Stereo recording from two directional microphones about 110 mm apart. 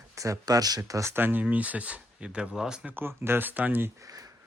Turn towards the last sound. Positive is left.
turn(degrees=-30)  # may be behind; listen again after turning